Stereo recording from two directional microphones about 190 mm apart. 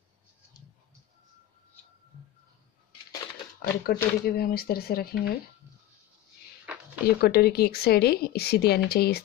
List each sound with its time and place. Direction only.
3.6 s speech: 55° left (ahead or behind)
7.2 s a woman's voice: 55° left (ahead or behind)